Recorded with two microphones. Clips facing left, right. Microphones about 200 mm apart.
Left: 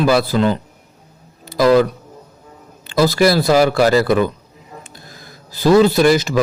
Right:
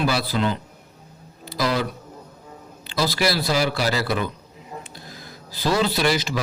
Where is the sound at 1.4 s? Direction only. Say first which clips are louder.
Left 11 dB; 50° left (ahead or behind).